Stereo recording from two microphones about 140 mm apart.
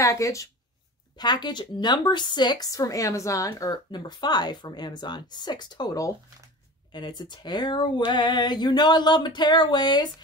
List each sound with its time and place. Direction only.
0.0 s a woman's voice: 20° left (ahead or behind)